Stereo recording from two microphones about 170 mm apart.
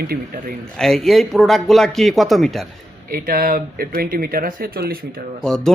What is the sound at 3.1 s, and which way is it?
Speech, 60° right (ahead or behind).